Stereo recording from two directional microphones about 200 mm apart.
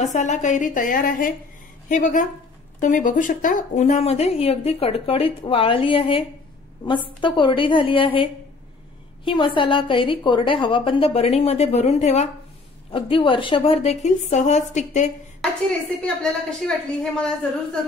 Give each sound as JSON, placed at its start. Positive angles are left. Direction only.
{"t": 0.0, "sound": "a woman's voice", "side_deg": 35}
{"t": 16.2, "sound": "a woman's voice", "side_deg": 5}